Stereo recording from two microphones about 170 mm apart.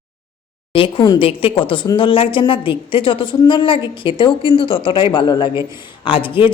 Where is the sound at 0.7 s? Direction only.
30° left (ahead or behind).